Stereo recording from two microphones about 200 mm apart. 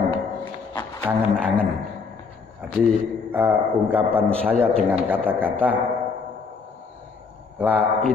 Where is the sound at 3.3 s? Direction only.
10° right (ahead or behind).